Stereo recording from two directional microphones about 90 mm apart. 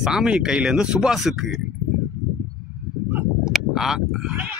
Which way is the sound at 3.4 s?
5° right (ahead or behind).